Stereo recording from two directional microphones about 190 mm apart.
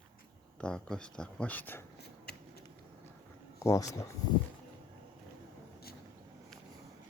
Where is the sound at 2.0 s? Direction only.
55° left (ahead or behind).